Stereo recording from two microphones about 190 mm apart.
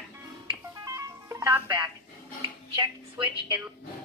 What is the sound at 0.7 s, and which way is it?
Music, 20° right (ahead or behind).